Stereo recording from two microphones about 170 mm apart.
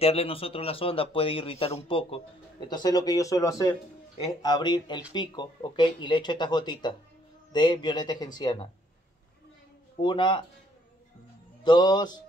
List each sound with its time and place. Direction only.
0.0 s speech: 35° left (ahead or behind)
10.0 s speech: 25° left (ahead or behind)
11.6 s speech: 25° left (ahead or behind)